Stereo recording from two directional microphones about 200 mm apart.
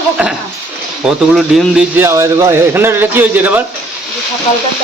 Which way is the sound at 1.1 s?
Centre (ahead or behind).